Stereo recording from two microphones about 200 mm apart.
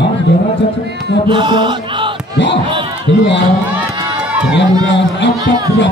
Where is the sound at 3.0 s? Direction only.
60° left (ahead or behind).